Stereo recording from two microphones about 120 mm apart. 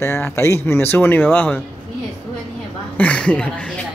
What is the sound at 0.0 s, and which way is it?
Speech, 20° left (ahead or behind).